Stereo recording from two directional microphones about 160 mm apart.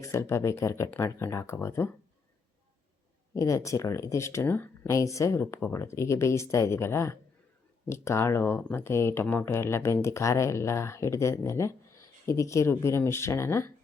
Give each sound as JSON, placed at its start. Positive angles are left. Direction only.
{"t": 0.0, "sound": "speech", "side_deg": 20}
{"t": 3.3, "sound": "speech", "side_deg": 20}